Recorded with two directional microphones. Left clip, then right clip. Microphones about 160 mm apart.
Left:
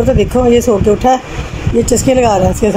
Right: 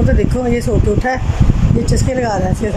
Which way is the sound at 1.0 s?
10° left (ahead or behind).